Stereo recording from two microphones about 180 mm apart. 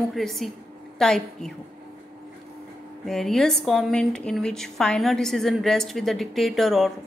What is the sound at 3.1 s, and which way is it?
A woman's voice, centre (ahead or behind).